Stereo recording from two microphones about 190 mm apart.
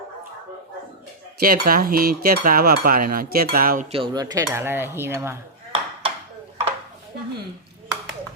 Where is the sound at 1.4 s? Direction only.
50° right (ahead or behind).